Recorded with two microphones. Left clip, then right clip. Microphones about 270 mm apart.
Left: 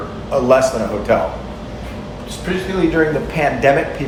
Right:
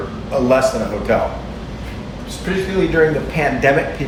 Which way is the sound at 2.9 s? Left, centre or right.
Centre.